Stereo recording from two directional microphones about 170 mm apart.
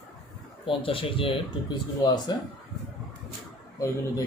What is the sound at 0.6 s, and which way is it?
Speech, 30° left (ahead or behind).